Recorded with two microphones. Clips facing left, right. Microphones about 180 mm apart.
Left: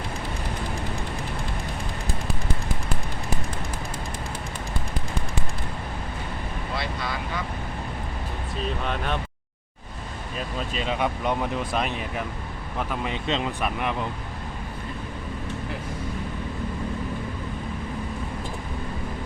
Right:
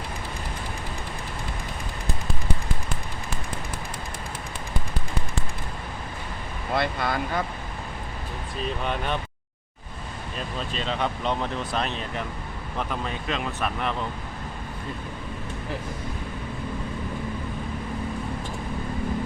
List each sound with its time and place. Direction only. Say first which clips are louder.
6.7 s vehicle: right 7 dB; 50° right (ahead or behind)
8.8 s speech: right 2 dB; centre (ahead or behind)
10.3 s speech: left 2 dB; 10° left (ahead or behind)
13.6 s speech: left 1 dB; 10° left (ahead or behind)